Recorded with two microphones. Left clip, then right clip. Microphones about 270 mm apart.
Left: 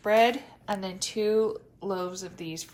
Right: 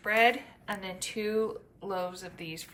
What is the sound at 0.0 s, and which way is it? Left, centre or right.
A woman's voice, centre.